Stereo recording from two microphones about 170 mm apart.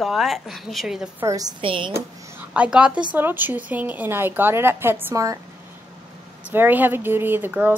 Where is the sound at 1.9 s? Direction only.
10° right (ahead or behind).